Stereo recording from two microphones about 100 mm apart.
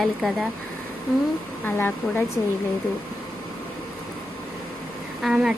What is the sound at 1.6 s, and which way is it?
Speech, 20° left (ahead or behind).